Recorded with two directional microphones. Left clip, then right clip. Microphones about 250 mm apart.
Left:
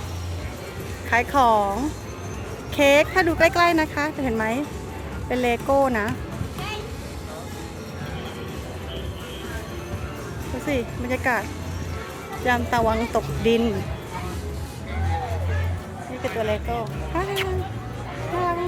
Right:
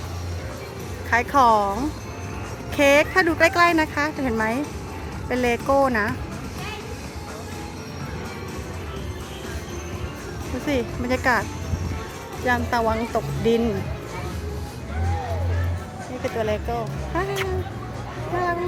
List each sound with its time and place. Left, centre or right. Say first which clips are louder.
1.1 s speech: right 1 dB; centre
10.7 s speech: right 2 dB; centre
12.5 s speech: left 1 dB; centre
16.4 s speech: even; centre